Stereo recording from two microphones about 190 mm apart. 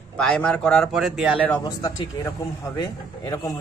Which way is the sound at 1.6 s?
20° left (ahead or behind).